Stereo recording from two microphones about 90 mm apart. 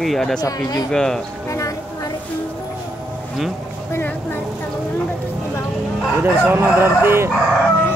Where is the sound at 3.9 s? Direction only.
25° left (ahead or behind).